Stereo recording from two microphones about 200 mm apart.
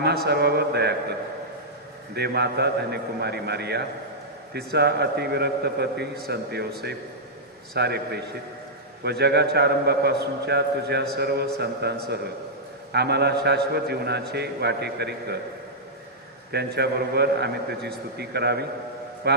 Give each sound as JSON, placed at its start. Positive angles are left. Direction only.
{"t": 0.3, "sound": "a man's voice", "side_deg": -55}
{"t": 2.1, "sound": "a man's voice", "side_deg": -55}
{"t": 7.7, "sound": "a man's voice", "side_deg": -55}
{"t": 16.5, "sound": "a man's voice", "side_deg": -55}